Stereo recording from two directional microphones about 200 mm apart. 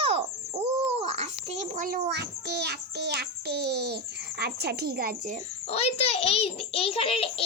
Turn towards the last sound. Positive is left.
turn(degrees=30)  # may be behind; listen again after turning